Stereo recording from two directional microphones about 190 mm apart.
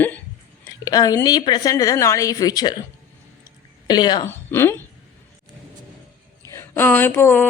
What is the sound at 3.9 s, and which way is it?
Speech, 20° left (ahead or behind).